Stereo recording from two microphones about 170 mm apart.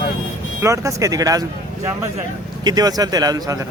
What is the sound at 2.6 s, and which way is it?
Speech, 25° right (ahead or behind).